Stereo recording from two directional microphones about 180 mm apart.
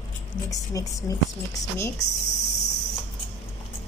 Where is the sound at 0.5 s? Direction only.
20° left (ahead or behind).